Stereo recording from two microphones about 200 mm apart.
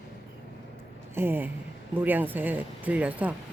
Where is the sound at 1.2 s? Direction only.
10° right (ahead or behind).